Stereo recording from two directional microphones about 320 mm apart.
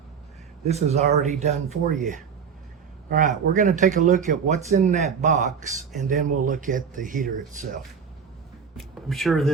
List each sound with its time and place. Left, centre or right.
0.7 s speech: centre
8.7 s speech: centre